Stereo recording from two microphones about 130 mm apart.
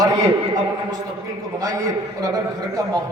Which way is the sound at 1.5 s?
25° right (ahead or behind).